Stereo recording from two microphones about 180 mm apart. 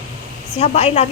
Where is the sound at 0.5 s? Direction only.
35° left (ahead or behind).